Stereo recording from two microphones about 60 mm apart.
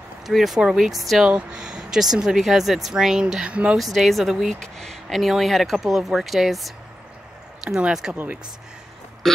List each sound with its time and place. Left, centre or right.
0.3 s speech: centre
1.3 s speech: centre
3.7 s speech: centre
8.1 s speech: right
9.2 s a sound: centre